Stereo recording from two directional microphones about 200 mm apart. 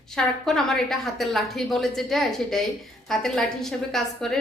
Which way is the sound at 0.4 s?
Centre (ahead or behind).